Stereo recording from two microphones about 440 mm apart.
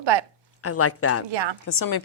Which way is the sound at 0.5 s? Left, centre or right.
Left.